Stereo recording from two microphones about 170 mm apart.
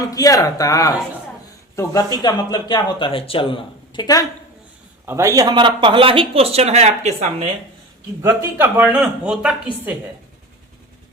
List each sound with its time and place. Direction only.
0.1 s speech: 20° left (ahead or behind)
5.0 s speech: 15° right (ahead or behind); by 7.4 s 40° right (ahead or behind)
8.2 s a man's voice: 15° right (ahead or behind)